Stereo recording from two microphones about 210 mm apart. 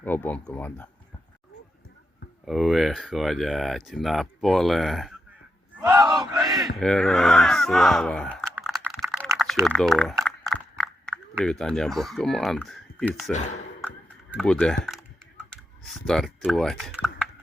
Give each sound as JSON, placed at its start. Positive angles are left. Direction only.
{"t": 0.0, "sound": "speech", "side_deg": 10}
{"t": 2.5, "sound": "speech", "side_deg": 0}
{"t": 5.8, "sound": "battle cry", "side_deg": -15}
{"t": 6.7, "sound": "speech", "side_deg": 0}
{"t": 8.4, "sound": "computer keyboard", "side_deg": -10}
{"t": 8.7, "sound": "typing", "side_deg": 0}
{"t": 9.6, "sound": "speech", "side_deg": 0}
{"t": 13.3, "sound": "speech", "side_deg": 35}
{"t": 13.8, "sound": "typing", "side_deg": -5}